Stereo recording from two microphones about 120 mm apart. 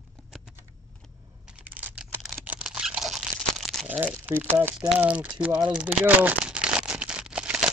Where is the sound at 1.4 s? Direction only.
15° right (ahead or behind).